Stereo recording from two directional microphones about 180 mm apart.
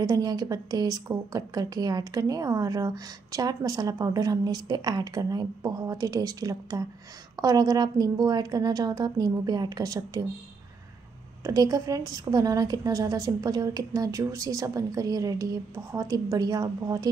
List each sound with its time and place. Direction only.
0.0 s a woman's voice: 20° right (ahead or behind)
11.4 s a woman's voice: 20° right (ahead or behind)